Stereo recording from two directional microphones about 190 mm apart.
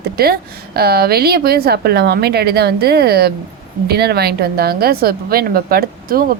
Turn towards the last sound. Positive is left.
turn(degrees=-50)  # may be behind; listen again after turning